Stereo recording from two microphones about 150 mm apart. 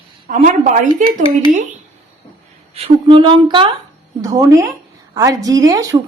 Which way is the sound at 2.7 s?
35° right (ahead or behind).